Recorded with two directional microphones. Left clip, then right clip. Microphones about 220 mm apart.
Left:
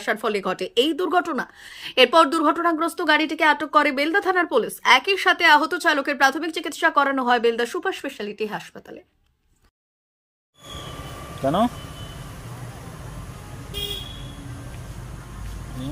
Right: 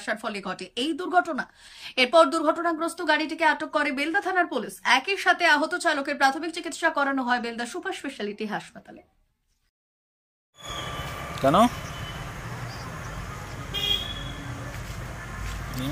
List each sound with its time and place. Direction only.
0.0 s speech: 15° left (ahead or behind)
11.4 s speech: 5° left (ahead or behind)